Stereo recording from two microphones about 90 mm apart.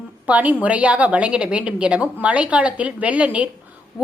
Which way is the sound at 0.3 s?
15° right (ahead or behind).